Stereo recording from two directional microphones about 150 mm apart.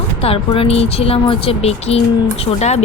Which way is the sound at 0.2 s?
40° left (ahead or behind).